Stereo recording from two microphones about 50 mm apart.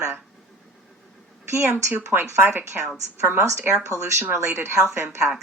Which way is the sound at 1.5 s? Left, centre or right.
Right.